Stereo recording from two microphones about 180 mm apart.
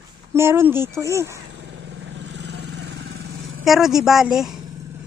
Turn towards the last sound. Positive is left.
turn(degrees=0)  # may be behind; listen again after turning